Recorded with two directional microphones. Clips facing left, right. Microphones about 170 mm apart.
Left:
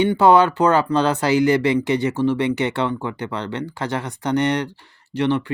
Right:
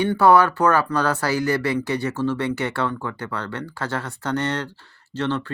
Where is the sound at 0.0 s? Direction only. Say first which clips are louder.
Left 2 dB; 20° left (ahead or behind).